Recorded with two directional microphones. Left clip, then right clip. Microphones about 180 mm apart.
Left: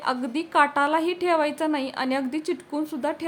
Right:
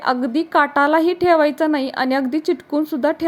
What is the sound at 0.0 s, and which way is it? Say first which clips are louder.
A woman's voice: right 7 dB; 35° right (ahead or behind).